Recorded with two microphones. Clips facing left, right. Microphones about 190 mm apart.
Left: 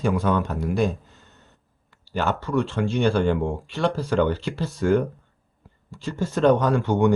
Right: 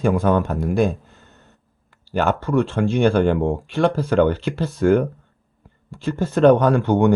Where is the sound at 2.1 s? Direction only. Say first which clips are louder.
Right 5 dB; 55° right (ahead or behind).